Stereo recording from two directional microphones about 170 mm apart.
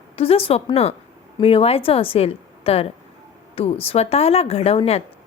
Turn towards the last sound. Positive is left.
turn(degrees=35)  # may be behind; listen again after turning